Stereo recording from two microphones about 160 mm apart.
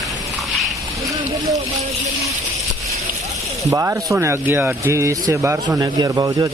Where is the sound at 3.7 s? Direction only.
20° right (ahead or behind).